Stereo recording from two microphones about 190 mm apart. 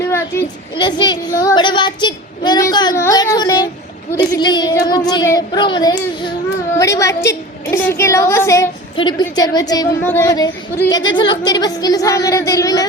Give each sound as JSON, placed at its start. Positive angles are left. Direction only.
{"t": 0.8, "sound": "a woman's voice", "side_deg": 25}